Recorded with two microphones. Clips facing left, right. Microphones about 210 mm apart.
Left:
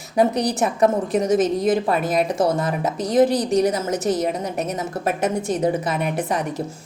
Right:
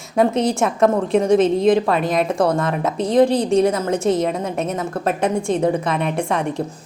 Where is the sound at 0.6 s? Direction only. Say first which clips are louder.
Even; centre (ahead or behind).